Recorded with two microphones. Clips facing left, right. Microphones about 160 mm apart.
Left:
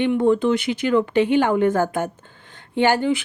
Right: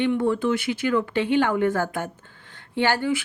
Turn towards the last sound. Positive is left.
turn(degrees=20)  # may be behind; listen again after turning